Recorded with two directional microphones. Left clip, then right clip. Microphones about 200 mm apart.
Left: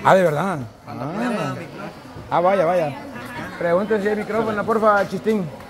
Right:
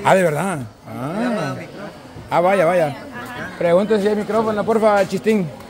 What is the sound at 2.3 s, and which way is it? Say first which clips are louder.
A man's voice: right 2 dB; 20° right (ahead or behind).